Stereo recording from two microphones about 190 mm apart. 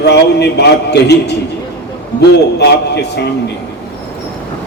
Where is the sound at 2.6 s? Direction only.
60° left (ahead or behind).